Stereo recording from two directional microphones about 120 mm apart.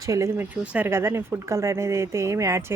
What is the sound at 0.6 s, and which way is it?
Speech, 10° right (ahead or behind).